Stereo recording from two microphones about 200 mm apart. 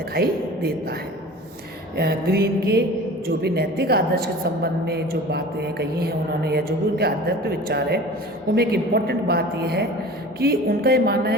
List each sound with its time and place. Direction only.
0.1 s a woman's voice: 55° right (ahead or behind)
2.0 s a woman's voice: 55° right (ahead or behind)